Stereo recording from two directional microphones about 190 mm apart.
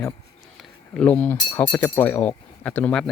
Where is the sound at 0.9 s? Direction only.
10° left (ahead or behind).